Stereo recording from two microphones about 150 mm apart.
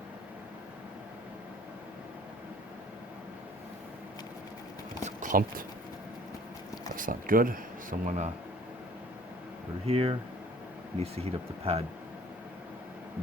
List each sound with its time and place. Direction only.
5.0 s a sound: 60° right (ahead or behind)
6.9 s speech: 65° right (ahead or behind)
9.8 s speech: 40° right (ahead or behind)